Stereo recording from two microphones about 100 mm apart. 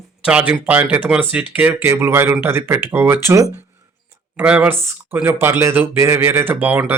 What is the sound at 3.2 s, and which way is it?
Speech, 30° right (ahead or behind).